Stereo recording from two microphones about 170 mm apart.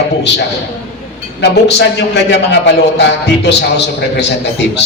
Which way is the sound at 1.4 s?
85° left.